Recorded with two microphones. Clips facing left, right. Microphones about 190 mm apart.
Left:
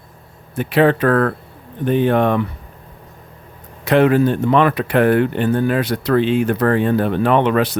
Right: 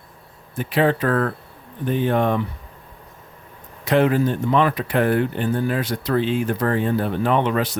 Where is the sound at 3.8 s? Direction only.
70° left (ahead or behind).